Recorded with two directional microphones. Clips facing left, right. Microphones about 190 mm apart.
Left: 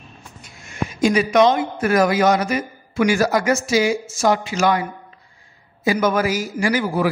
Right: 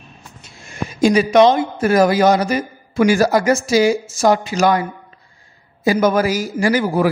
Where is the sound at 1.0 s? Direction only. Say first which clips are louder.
Right 4 dB; 30° right (ahead or behind).